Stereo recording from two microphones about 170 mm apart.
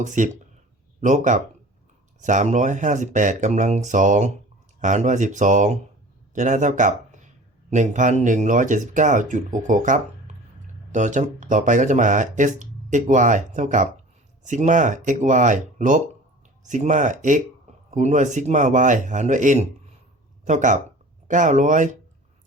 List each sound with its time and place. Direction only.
0.0 s speech: 45° right (ahead or behind)